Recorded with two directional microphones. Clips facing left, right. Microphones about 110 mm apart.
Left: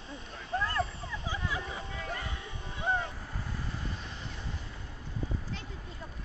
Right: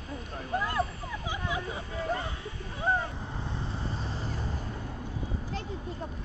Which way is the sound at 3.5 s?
30° right (ahead or behind).